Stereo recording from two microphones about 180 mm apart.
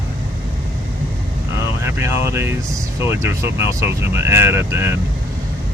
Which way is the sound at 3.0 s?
15° right (ahead or behind).